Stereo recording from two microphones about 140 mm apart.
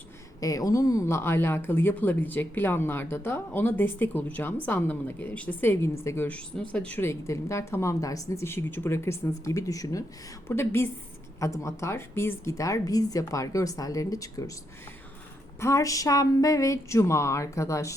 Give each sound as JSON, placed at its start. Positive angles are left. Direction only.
{"t": 0.3, "sound": "a woman's voice", "side_deg": 25}
{"t": 15.6, "sound": "a woman's voice", "side_deg": 25}